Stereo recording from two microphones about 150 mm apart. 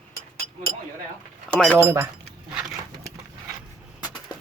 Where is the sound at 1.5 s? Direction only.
5° left (ahead or behind).